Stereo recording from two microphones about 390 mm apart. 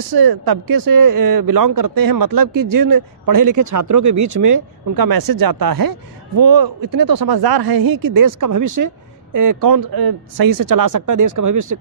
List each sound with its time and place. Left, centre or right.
0.1 s speech: right